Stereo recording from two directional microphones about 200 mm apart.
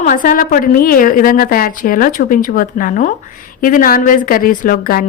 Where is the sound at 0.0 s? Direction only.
40° left (ahead or behind).